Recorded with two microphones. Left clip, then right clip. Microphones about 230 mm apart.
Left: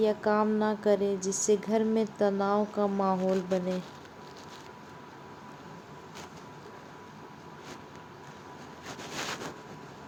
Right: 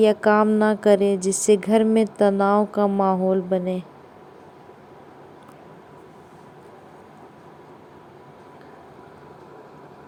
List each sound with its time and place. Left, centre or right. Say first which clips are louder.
0.0 s a woman's voice: right 9 dB; right